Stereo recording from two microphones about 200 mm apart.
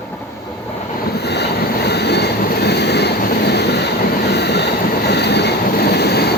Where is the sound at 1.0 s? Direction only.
55° left (ahead or behind).